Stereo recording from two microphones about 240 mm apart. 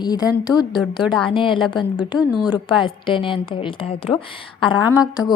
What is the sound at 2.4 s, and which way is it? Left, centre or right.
A woman's voice, centre.